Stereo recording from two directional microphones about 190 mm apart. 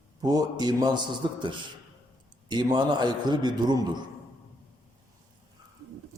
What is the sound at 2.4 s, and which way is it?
A man's voice, 25° right (ahead or behind).